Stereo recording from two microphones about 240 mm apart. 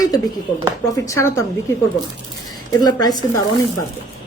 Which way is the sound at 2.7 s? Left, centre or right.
Centre.